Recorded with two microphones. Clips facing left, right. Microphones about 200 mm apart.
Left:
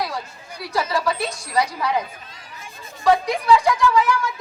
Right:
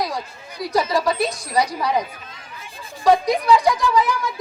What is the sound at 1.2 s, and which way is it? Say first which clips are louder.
Speech: right 5 dB; 35° right (ahead or behind).